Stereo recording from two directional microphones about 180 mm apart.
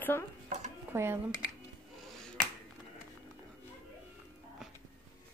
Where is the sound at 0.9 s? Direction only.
15° right (ahead or behind).